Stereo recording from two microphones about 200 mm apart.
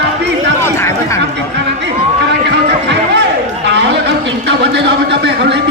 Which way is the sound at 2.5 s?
60° right (ahead or behind).